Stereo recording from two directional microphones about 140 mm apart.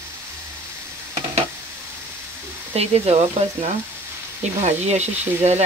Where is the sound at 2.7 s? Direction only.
50° right (ahead or behind).